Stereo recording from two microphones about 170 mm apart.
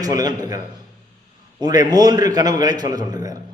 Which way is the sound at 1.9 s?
25° right (ahead or behind).